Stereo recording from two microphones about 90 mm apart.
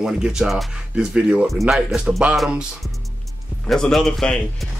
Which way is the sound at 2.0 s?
10° right (ahead or behind).